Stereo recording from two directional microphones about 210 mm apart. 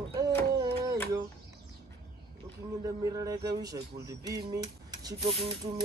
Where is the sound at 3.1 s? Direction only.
15° right (ahead or behind).